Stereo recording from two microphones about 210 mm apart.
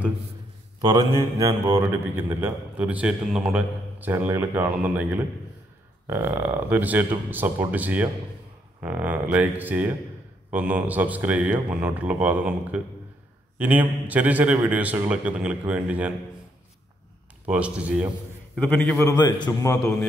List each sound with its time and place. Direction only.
0.7 s speech: 20° right (ahead or behind)
17.5 s a man's voice: 5° right (ahead or behind)
18.6 s a man's voice: 5° left (ahead or behind)
19.1 s a man's voice: 20° left (ahead or behind)